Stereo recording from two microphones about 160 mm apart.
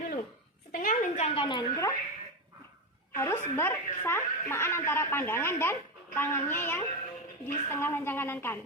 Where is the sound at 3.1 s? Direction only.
15° left (ahead or behind).